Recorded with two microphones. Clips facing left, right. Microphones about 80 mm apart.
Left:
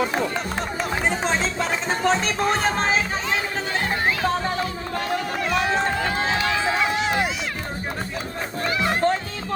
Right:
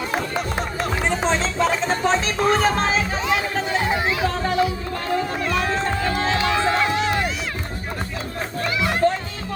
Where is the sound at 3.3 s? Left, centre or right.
Centre.